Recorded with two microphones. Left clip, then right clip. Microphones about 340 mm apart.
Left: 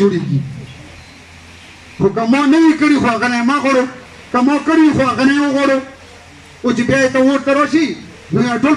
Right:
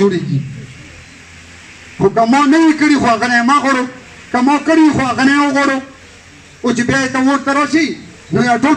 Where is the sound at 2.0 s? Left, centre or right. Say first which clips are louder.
Right 3 dB; right.